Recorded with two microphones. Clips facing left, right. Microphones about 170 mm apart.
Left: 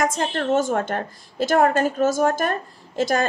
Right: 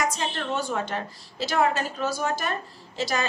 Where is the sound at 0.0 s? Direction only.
50° left (ahead or behind).